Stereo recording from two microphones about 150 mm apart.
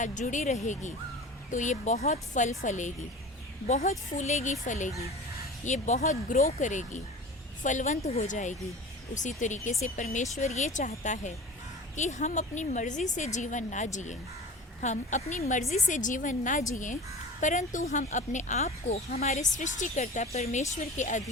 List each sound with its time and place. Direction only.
0.0 s a woman's voice: 55° left (ahead or behind)